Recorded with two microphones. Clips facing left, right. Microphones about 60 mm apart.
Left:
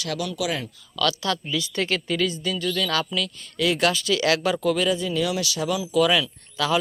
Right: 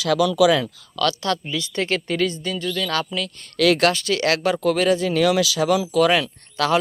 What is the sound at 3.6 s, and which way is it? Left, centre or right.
Speech, right.